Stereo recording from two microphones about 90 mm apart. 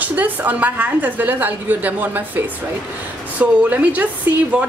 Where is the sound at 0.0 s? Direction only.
20° right (ahead or behind).